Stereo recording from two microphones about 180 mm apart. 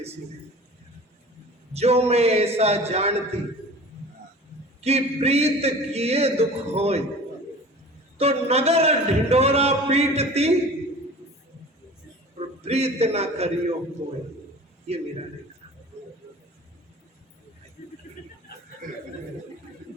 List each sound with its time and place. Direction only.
1.7 s a man's voice: 35° right (ahead or behind)
4.8 s a man's voice: 35° right (ahead or behind)
8.2 s a man's voice: 35° right (ahead or behind)
12.6 s a man's voice: 35° right (ahead or behind)